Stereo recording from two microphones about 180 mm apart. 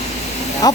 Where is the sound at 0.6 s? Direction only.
20° left (ahead or behind).